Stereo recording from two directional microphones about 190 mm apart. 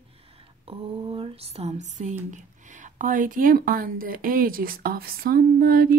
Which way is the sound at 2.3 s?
40° right (ahead or behind).